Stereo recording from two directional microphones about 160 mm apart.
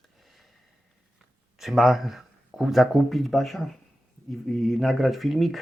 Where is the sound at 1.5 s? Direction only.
Centre (ahead or behind).